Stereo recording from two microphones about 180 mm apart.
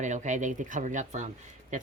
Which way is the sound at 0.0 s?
40° right (ahead or behind).